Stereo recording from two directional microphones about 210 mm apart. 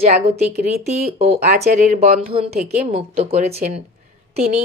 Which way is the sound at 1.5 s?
35° right (ahead or behind).